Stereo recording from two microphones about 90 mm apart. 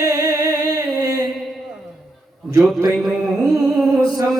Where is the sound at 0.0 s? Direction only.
45° right (ahead or behind).